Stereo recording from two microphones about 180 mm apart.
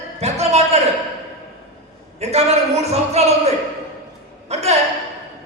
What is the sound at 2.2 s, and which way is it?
A woman's voice, 35° right (ahead or behind).